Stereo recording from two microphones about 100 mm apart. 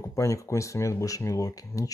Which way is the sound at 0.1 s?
30° left (ahead or behind).